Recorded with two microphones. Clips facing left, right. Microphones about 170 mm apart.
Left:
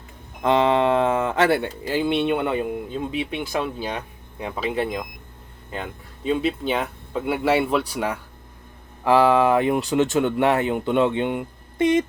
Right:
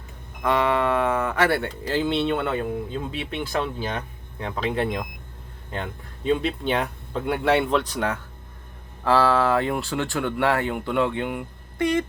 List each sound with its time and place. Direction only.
0.4 s speech: 25° left (ahead or behind)